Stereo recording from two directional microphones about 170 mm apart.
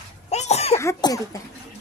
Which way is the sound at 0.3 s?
40° left (ahead or behind).